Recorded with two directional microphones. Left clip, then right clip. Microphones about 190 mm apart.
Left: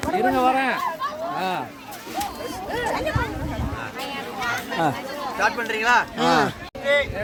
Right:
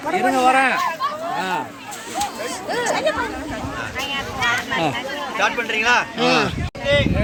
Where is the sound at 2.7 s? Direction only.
30° right (ahead or behind).